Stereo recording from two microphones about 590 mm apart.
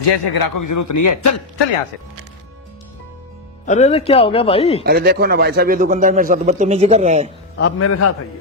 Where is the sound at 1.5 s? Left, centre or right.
Left.